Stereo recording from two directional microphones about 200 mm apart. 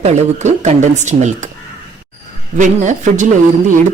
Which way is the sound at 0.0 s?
35° right (ahead or behind).